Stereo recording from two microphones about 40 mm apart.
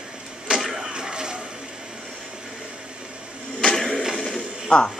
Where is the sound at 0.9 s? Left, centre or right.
Centre.